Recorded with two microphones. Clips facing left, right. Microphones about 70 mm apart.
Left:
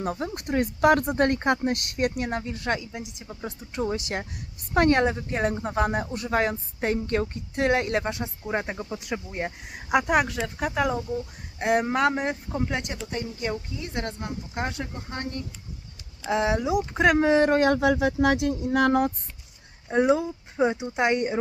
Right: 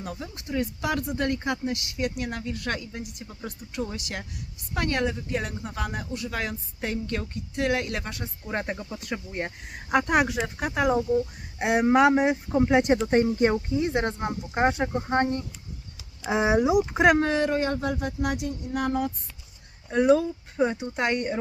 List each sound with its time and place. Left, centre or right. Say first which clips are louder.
0.0 s speech: left 7 dB; left; by 3.5 s centre
3.6 s speech: left 5 dB; left
8.4 s speech: left 1 dB; centre
10.2 s speech: even; centre
12.6 s speech: right 9 dB; centre
13.1 s speech: right 9 dB; right; by 17.2 s centre
17.6 s speech: left 6 dB; left
19.9 s speech: right 1 dB; left